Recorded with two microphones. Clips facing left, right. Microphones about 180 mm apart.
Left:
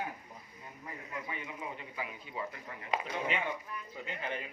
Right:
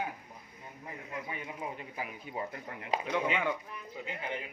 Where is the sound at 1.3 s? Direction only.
40° right (ahead or behind).